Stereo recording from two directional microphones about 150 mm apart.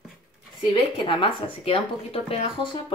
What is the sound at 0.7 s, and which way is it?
A woman's voice, 35° left (ahead or behind).